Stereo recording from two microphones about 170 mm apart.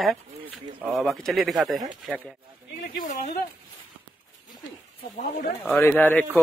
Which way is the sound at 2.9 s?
55° left (ahead or behind).